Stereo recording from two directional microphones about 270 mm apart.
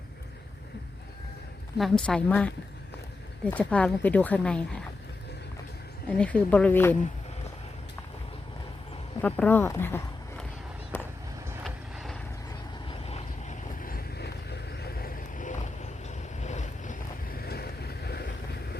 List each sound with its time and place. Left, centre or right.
1.8 s speech: centre
6.1 s speech: centre
9.2 s speech: centre
10.9 s vehicle: centre
11.6 s boat: centre
12.9 s vehicle: left
17.4 s boat: left